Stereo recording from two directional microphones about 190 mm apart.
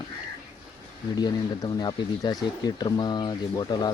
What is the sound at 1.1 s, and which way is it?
Speech, 20° left (ahead or behind).